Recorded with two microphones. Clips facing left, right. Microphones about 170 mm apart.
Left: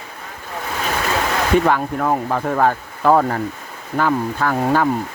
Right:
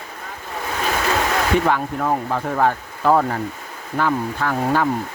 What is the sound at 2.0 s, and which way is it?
Speech, 70° left (ahead or behind).